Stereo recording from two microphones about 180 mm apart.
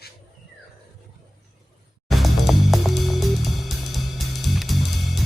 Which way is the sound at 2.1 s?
Centre (ahead or behind).